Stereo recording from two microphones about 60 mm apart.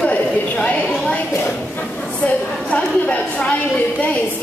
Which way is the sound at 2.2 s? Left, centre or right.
Left.